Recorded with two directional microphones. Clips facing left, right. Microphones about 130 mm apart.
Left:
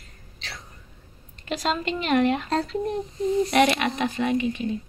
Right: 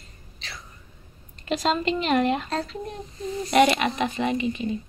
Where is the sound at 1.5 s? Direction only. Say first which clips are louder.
Right 2 dB; centre (ahead or behind).